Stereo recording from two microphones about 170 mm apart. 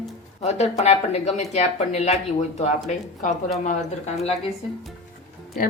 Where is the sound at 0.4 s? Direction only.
40° left (ahead or behind).